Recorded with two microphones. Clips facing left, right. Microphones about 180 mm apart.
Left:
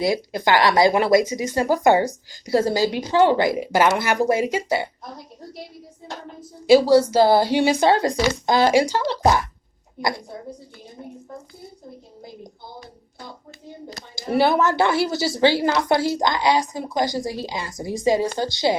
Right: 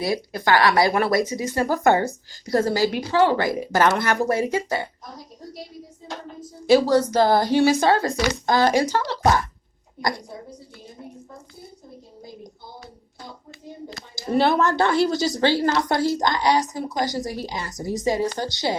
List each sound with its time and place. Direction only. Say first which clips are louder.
0.0 s a woman's voice: left 3 dB; 20° left (ahead or behind)
6.7 s a woman's voice: left 3 dB; 10° left (ahead or behind)
14.3 s a woman's voice: left 1 dB; 5° left (ahead or behind)